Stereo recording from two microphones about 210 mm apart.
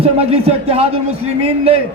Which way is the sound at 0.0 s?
30° right (ahead or behind).